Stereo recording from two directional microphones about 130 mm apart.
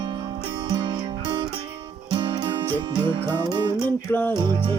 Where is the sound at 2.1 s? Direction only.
35° right (ahead or behind).